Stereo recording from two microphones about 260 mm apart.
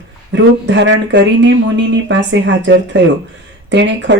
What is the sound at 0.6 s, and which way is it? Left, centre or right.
Speech, right.